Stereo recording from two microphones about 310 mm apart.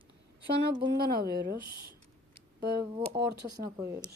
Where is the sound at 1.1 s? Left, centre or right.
Right.